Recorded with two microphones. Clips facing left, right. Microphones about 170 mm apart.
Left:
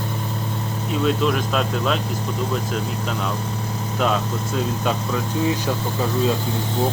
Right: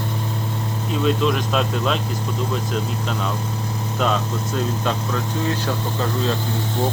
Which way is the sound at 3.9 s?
5° left (ahead or behind).